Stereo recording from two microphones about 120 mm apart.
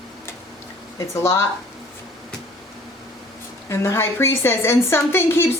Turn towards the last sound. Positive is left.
turn(degrees=20)  # may be behind; listen again after turning